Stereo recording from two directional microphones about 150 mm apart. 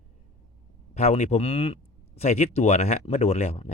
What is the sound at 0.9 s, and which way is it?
Speech, 45° left (ahead or behind).